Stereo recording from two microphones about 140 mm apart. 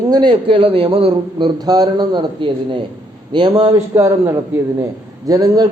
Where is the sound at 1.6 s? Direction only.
30° right (ahead or behind).